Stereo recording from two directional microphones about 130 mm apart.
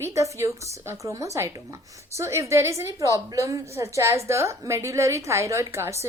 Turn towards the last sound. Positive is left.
turn(degrees=-20)  # may be behind; listen again after turning